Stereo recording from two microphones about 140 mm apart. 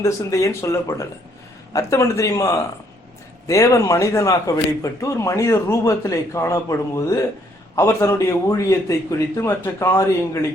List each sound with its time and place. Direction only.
0.0 s a man's voice: 25° left (ahead or behind)